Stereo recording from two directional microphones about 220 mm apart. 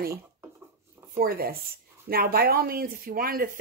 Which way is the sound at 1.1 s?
40° right (ahead or behind).